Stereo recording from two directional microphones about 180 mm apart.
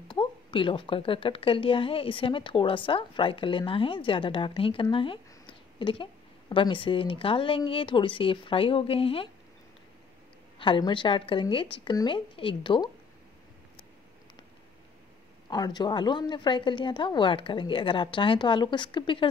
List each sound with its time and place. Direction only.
0.1 s a woman's voice: 30° left (ahead or behind)
10.6 s a woman's voice: 25° left (ahead or behind)
15.5 s a woman's voice: 20° left (ahead or behind)